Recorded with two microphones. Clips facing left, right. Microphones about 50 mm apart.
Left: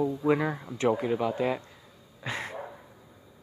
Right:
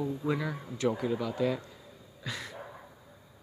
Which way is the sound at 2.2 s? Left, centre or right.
Left.